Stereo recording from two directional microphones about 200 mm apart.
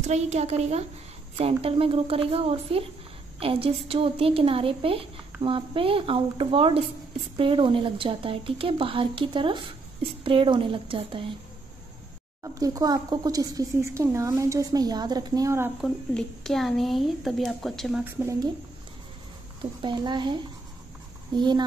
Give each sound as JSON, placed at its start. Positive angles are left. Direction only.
{"t": 0.0, "sound": "a woman's voice", "side_deg": -35}
{"t": 12.5, "sound": "a woman's voice", "side_deg": -20}
{"t": 15.8, "sound": "speech", "side_deg": 0}
{"t": 18.0, "sound": "a woman's voice", "side_deg": -15}
{"t": 19.6, "sound": "a woman's voice", "side_deg": -25}
{"t": 21.4, "sound": "a woman's voice", "side_deg": -20}